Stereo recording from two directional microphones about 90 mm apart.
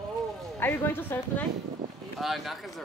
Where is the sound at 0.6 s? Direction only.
25° left (ahead or behind).